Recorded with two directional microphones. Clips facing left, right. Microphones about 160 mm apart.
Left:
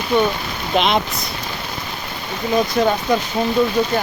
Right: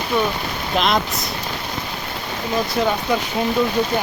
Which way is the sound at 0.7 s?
Centre (ahead or behind).